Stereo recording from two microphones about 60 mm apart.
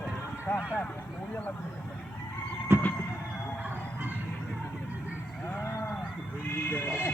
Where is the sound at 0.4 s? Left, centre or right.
Left.